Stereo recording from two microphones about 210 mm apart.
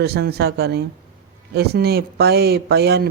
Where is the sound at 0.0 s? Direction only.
50° right (ahead or behind).